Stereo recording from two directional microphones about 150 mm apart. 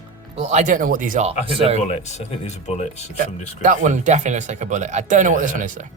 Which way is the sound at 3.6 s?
60° right (ahead or behind).